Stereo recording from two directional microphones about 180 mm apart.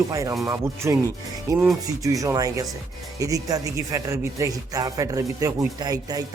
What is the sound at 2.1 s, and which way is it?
Speech, 20° right (ahead or behind).